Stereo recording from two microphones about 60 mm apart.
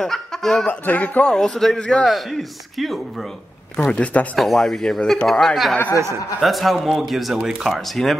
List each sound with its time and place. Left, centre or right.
0.0 s speech: centre
0.7 s speech: left
1.2 s speech: centre
1.8 s a man's voice: centre
2.0 s speech: centre
3.7 s speech: centre
4.4 s speech: centre